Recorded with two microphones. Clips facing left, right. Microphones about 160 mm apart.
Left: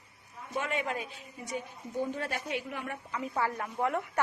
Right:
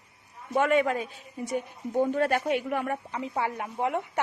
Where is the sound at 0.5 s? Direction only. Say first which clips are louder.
Right 10 dB; 60° right (ahead or behind).